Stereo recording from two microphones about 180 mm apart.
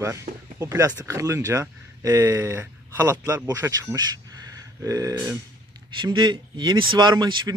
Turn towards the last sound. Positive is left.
turn(degrees=-25)  # may be behind; listen again after turning